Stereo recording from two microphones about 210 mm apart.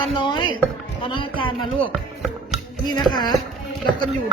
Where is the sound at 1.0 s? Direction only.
25° left (ahead or behind).